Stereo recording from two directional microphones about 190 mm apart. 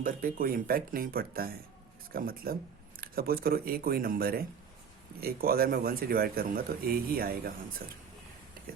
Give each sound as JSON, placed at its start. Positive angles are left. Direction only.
{"t": 0.0, "sound": "a man's voice", "side_deg": -50}